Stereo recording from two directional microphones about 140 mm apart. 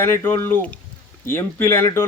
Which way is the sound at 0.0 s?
20° left (ahead or behind).